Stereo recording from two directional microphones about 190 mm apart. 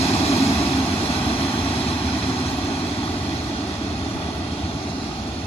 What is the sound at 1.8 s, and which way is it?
Vehicle, 30° left (ahead or behind).